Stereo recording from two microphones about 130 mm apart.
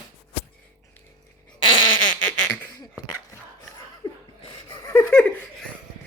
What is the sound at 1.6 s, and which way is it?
Fart, 35° left (ahead or behind).